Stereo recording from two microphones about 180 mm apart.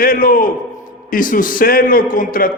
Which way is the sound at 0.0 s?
55° left (ahead or behind).